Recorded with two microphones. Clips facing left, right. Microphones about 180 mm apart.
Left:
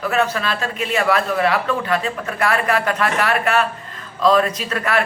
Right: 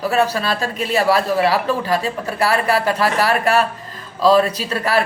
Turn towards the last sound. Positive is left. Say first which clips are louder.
# right 2 dB
turn(degrees=-35)  # may be behind; listen again after turning